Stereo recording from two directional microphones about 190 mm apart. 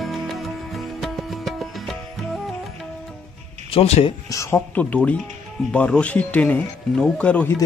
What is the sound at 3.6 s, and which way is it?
Speech, 30° left (ahead or behind).